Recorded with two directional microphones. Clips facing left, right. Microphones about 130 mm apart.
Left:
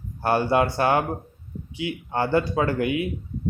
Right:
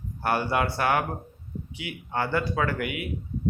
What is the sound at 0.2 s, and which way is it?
A man's voice, 30° left (ahead or behind).